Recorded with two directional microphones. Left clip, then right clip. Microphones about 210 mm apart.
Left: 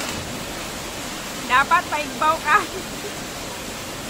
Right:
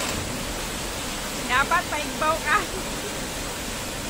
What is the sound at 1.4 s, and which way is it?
Speech, 30° left (ahead or behind).